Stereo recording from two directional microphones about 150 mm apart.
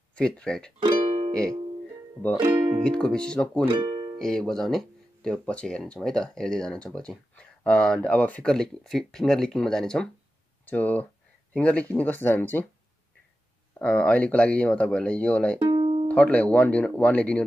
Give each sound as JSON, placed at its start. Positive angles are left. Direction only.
{"t": 0.1, "sound": "speech", "side_deg": 5}
{"t": 0.8, "sound": "music", "side_deg": -35}
{"t": 2.8, "sound": "speech", "side_deg": 5}
{"t": 3.6, "sound": "speech", "side_deg": -30}
{"t": 4.2, "sound": "speech", "side_deg": 5}
{"t": 13.7, "sound": "speech", "side_deg": 10}
{"t": 15.6, "sound": "music", "side_deg": -35}
{"t": 16.1, "sound": "speech", "side_deg": 10}